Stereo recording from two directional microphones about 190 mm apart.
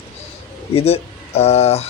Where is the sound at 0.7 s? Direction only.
30° left (ahead or behind).